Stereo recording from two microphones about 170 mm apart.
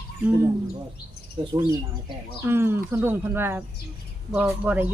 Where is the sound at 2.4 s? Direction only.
15° right (ahead or behind).